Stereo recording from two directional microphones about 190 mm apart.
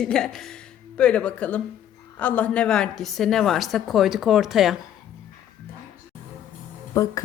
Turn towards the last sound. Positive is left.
turn(degrees=15)  # may be behind; listen again after turning